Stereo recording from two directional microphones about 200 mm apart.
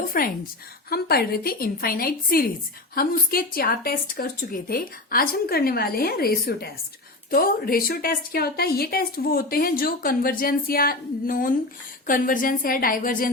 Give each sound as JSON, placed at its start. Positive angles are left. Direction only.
{"t": 0.1, "sound": "a woman's voice", "side_deg": 45}